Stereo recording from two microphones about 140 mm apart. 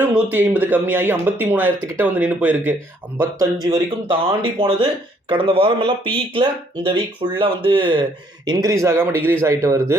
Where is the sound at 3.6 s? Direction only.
30° right (ahead or behind).